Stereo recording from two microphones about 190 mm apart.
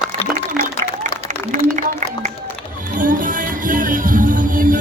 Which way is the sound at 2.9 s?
45° right (ahead or behind).